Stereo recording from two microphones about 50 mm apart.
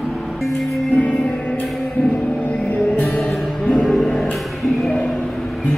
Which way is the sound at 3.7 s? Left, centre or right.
Centre.